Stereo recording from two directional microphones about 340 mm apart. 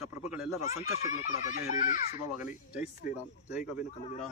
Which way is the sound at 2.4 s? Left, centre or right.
Centre.